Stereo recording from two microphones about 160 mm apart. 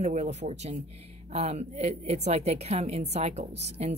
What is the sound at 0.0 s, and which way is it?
A woman's voice, 45° right (ahead or behind).